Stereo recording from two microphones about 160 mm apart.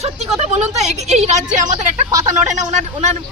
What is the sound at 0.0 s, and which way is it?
A woman's voice, 40° right (ahead or behind).